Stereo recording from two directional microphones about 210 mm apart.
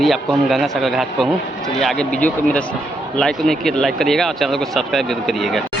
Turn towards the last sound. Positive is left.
turn(degrees=0)  # may be behind; listen again after turning